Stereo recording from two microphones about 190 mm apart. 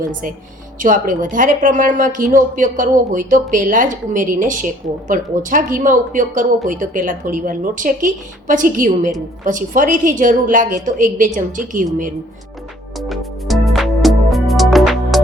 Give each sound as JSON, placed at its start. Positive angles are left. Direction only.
{"t": 0.1, "sound": "a woman's voice", "side_deg": -45}
{"t": 13.0, "sound": "music", "side_deg": 0}